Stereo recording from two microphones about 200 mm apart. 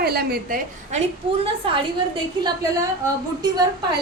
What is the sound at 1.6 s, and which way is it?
Speech, 25° right (ahead or behind).